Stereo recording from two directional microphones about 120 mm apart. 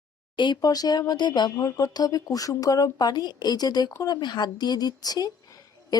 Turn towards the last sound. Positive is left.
turn(degrees=30)  # may be behind; listen again after turning